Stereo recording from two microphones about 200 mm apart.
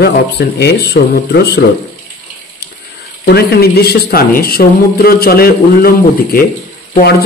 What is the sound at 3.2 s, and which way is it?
Speech, 50° left (ahead or behind).